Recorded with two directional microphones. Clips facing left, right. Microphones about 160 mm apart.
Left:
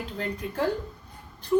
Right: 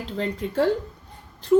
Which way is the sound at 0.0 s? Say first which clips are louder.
Right 4 dB; 90° right.